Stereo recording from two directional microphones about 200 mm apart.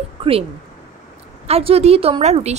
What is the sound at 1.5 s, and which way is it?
A woman's voice, 30° right (ahead or behind).